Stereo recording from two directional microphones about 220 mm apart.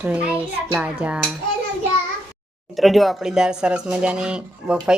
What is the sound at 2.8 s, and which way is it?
Speech, centre (ahead or behind).